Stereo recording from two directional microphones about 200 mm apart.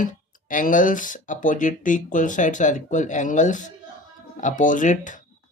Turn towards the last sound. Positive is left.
turn(degrees=40)  # may be behind; listen again after turning